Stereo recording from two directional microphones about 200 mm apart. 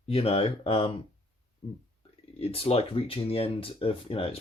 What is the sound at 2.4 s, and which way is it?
Speech, 30° left (ahead or behind).